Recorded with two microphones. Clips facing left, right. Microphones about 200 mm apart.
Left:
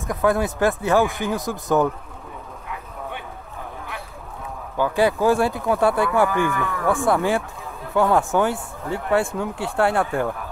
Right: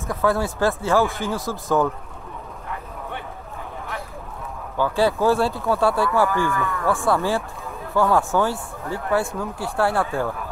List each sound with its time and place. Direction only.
0.0 s speech: 20° left (ahead or behind)
4.7 s speech: 15° left (ahead or behind)